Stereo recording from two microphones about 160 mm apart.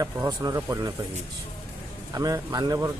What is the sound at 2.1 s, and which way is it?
Speech, 20° right (ahead or behind).